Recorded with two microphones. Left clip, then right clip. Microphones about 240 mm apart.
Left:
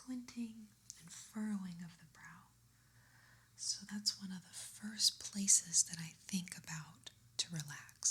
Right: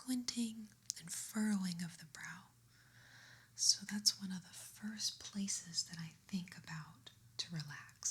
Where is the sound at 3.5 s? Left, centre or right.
Centre.